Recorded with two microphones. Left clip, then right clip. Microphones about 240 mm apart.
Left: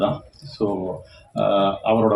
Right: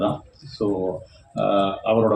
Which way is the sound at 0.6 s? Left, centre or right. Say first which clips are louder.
Even; left.